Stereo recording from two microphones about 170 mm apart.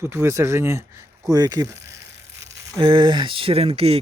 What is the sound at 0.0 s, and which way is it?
Speech, 15° right (ahead or behind).